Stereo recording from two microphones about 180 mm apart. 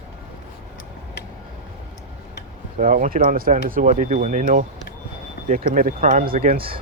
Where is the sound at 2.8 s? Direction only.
45° right (ahead or behind).